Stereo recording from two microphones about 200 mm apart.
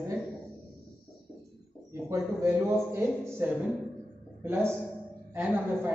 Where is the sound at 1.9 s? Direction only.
15° right (ahead or behind).